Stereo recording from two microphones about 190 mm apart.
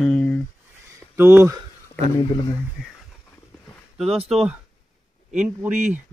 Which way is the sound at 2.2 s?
25° left (ahead or behind).